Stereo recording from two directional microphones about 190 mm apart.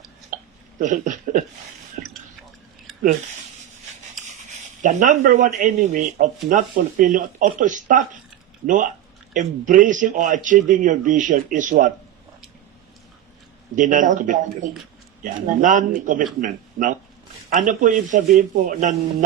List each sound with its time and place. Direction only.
0.3 s hiccup: 40° right (ahead or behind)
0.8 s speech: 40° right (ahead or behind)
4.8 s speech: 40° right (ahead or behind)
13.7 s speech: 40° right (ahead or behind)
17.5 s speech: 45° right (ahead or behind)